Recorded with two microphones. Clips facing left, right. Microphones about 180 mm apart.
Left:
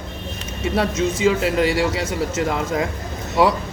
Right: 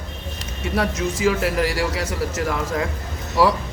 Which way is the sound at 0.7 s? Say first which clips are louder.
Left 2 dB; 25° left (ahead or behind).